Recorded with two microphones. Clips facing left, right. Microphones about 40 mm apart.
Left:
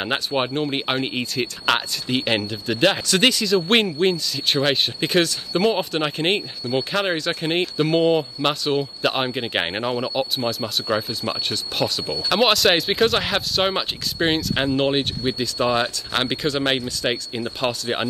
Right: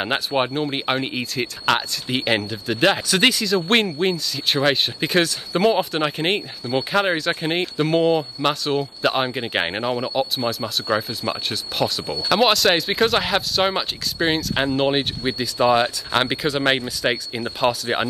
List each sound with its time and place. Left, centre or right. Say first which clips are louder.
0.0 s speech: right 1 dB; centre
12.0 s speech: even; right
12.3 s speech: right 1 dB; centre